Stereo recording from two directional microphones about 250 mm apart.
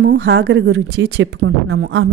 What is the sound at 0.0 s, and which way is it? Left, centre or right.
A woman's voice, right.